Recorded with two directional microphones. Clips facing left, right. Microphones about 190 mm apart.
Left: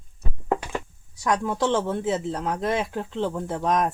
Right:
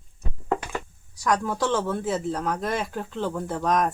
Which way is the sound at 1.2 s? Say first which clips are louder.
Left 1 dB; 25° left (ahead or behind).